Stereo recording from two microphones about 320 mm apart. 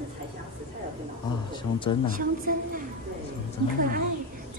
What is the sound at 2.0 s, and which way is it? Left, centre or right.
Speech, right.